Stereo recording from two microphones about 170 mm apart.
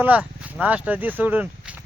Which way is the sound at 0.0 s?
10° right (ahead or behind).